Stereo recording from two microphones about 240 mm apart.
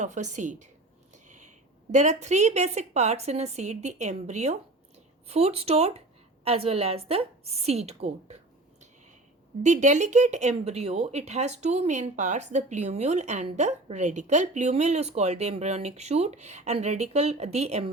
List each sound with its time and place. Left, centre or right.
0.0 s speech: right
9.6 s speech: right